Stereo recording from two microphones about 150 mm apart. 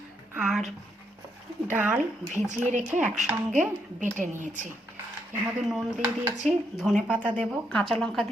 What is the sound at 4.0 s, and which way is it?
Speech, 55° right (ahead or behind).